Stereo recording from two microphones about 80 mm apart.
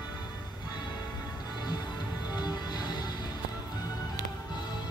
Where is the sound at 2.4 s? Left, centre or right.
Left.